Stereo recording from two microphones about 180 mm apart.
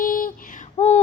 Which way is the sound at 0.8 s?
40° left (ahead or behind).